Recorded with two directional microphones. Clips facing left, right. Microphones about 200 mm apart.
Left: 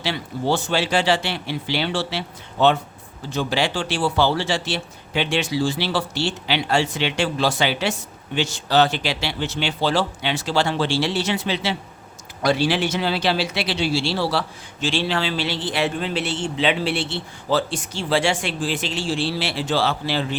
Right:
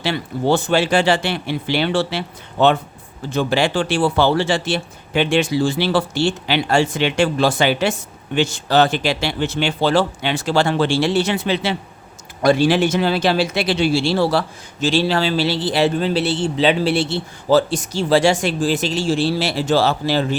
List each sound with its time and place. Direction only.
0.0 s speech: 55° right (ahead or behind)